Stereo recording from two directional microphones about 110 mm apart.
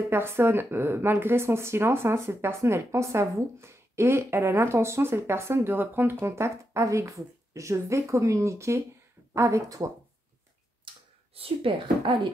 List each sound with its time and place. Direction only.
0.1 s speech: 20° right (ahead or behind)
11.3 s speech: 60° right (ahead or behind)